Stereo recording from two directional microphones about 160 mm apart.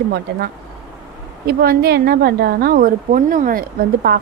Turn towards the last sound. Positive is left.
turn(degrees=-65)  # may be behind; listen again after turning